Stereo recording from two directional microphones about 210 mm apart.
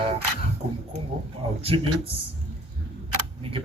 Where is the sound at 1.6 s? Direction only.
25° right (ahead or behind).